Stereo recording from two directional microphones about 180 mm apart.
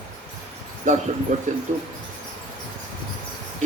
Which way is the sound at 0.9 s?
40° right (ahead or behind).